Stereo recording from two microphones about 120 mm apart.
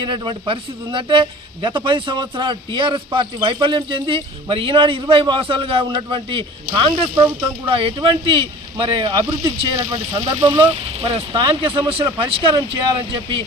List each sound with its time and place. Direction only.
0.0 s a man's voice: 40° right (ahead or behind)